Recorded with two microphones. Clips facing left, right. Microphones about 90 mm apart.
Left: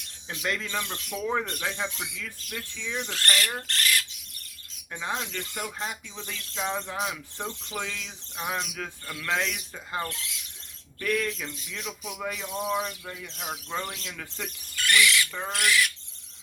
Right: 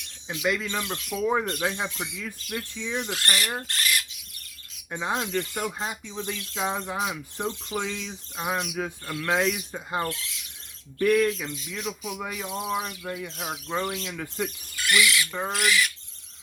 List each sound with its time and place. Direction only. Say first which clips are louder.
0.4 s speech: right 3 dB; 10° right (ahead or behind)
4.9 s owl: right 3 dB; 20° right (ahead or behind)
5.1 s speech: right 6 dB; 45° right (ahead or behind)
5.8 s speech: right 4 dB; 10° right (ahead or behind)
9.7 s owl: right 3 dB; 25° right (ahead or behind)
11.0 s speech: right 7 dB; 20° right (ahead or behind)
15.5 s a sound: even; centre (ahead or behind)